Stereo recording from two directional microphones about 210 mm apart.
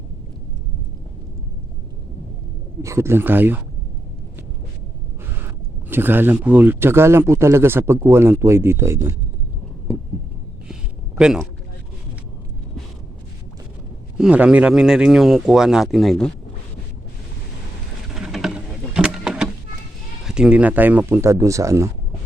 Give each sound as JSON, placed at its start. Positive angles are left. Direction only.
{"t": 2.8, "sound": "speech", "side_deg": -15}
{"t": 5.9, "sound": "speech", "side_deg": -10}
{"t": 11.2, "sound": "speech", "side_deg": -5}
{"t": 14.2, "sound": "speech", "side_deg": -5}
{"t": 18.1, "sound": "boat", "side_deg": 0}
{"t": 18.9, "sound": "vehicle", "side_deg": -5}
{"t": 20.2, "sound": "speech", "side_deg": -5}